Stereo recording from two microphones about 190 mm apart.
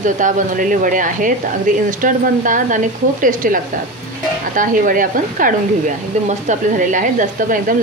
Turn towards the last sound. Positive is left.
turn(degrees=-45)  # may be behind; listen again after turning